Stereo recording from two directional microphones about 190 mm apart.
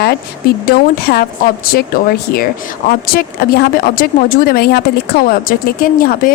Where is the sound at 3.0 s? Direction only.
55° left (ahead or behind).